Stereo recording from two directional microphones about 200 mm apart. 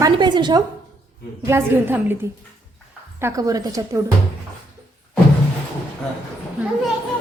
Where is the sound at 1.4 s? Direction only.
10° right (ahead or behind).